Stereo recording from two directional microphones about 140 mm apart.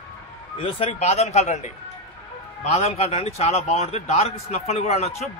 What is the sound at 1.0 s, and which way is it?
Speech, 55° left (ahead or behind).